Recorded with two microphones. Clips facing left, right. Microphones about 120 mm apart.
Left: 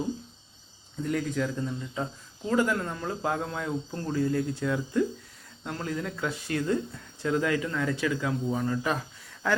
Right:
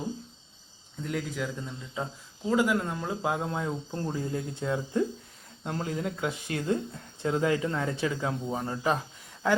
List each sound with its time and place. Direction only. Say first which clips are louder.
1.0 s speech: left 4 dB; 5° right (ahead or behind); by 9.0 s 25° right (ahead or behind)